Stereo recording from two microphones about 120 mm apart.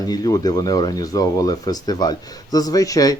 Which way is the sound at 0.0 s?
30° left (ahead or behind).